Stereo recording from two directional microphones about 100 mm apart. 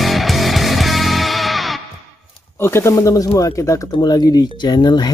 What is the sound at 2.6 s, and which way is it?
Speech, 25° left (ahead or behind).